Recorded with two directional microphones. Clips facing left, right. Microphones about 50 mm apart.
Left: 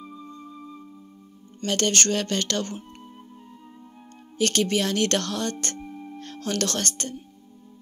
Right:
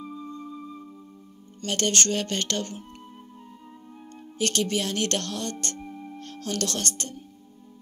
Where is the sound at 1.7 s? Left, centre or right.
Left.